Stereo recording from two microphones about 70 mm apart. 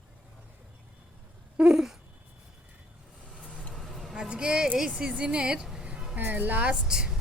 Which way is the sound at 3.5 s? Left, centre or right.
Centre.